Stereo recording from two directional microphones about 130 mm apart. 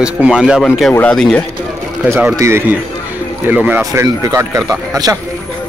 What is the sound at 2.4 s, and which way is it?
Speech, 20° right (ahead or behind).